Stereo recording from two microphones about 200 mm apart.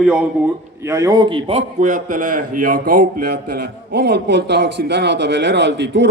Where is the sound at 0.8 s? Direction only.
15° right (ahead or behind).